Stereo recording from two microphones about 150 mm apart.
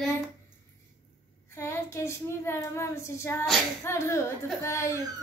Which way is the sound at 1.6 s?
15° left (ahead or behind).